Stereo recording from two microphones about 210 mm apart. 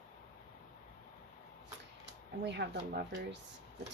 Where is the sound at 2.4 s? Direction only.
55° right (ahead or behind).